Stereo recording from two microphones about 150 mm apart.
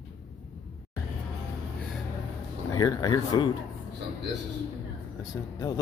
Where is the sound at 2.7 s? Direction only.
25° left (ahead or behind).